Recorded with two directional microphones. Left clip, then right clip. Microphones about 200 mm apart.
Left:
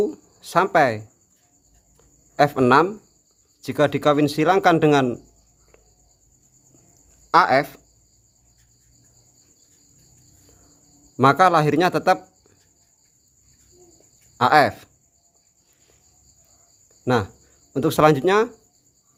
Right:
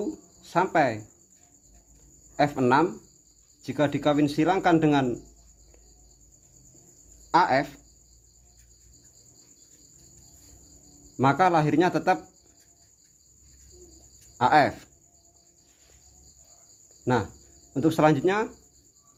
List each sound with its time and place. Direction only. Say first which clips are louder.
0.5 s speech: left 6 dB; 35° left (ahead or behind)
2.3 s speech: left 6 dB; 35° left (ahead or behind)
7.3 s speech: left 5 dB; 30° left (ahead or behind)
11.2 s speech: left 6 dB; 35° left (ahead or behind)
14.3 s speech: left 4 dB; 30° left (ahead or behind)
17.7 s speech: left 5 dB; 30° left (ahead or behind)